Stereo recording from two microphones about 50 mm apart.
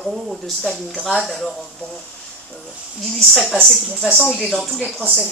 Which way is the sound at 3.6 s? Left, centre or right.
Centre.